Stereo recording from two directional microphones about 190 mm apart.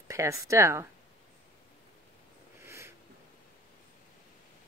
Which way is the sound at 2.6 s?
15° right (ahead or behind).